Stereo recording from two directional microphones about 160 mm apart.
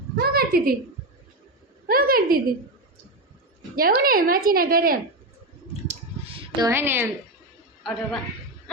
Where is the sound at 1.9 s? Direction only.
65° right (ahead or behind).